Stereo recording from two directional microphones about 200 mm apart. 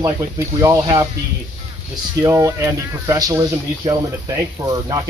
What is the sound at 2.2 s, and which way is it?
Speech, 15° right (ahead or behind).